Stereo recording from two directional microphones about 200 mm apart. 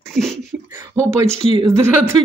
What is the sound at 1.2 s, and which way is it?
Speech, 30° right (ahead or behind).